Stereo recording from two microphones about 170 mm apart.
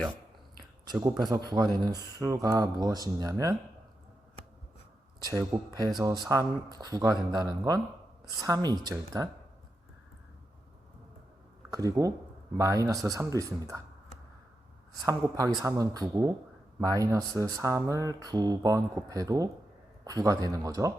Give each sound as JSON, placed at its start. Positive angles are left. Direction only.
{"t": 1.5, "sound": "speech", "side_deg": -25}
{"t": 5.2, "sound": "speech", "side_deg": -25}
{"t": 11.7, "sound": "speech", "side_deg": -20}
{"t": 15.0, "sound": "speech", "side_deg": -20}